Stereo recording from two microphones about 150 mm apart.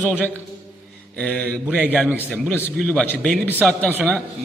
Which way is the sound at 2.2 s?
10° left (ahead or behind).